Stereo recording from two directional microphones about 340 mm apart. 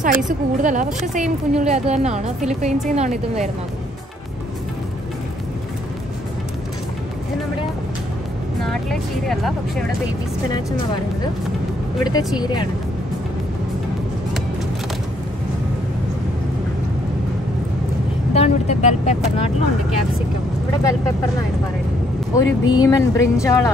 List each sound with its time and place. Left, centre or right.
0.3 s a woman's voice: right
8.6 s speech: centre
12.0 s speech: centre
18.3 s vehicle: centre
22.3 s speech: centre